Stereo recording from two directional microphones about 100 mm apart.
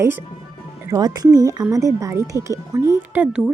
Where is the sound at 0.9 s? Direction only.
40° right (ahead or behind).